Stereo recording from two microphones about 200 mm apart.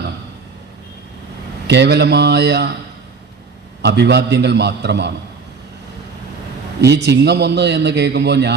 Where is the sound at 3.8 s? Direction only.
60° right (ahead or behind).